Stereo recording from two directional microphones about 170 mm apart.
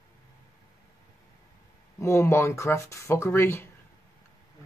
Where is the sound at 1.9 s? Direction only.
15° left (ahead or behind).